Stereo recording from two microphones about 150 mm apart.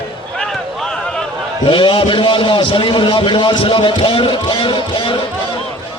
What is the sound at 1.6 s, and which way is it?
A man's voice, 35° left (ahead or behind).